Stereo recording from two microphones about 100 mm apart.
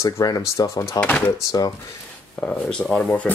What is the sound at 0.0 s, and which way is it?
Speech, 40° left (ahead or behind).